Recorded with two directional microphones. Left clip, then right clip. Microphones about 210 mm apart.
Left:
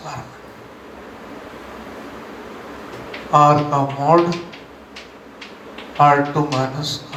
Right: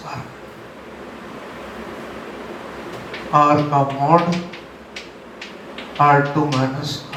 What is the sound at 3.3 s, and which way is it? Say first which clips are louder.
Speech: left 1 dB; 35° left (ahead or behind).